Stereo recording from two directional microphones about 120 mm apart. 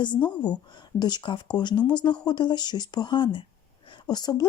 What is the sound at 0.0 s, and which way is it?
Speech, 40° left (ahead or behind).